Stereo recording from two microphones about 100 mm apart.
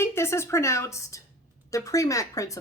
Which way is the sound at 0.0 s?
25° left (ahead or behind).